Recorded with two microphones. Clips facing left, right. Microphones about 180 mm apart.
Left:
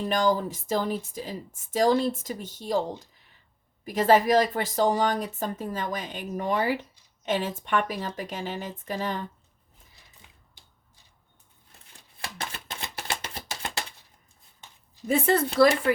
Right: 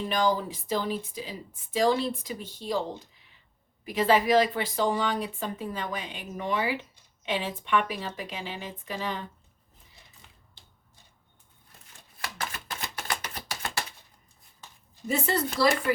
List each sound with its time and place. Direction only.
0.1 s a woman's voice: 45° left (ahead or behind)
12.2 s typewriter: 25° left (ahead or behind)
15.0 s a woman's voice: 55° left (ahead or behind)